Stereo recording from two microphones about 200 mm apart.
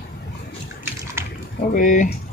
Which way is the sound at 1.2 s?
10° right (ahead or behind).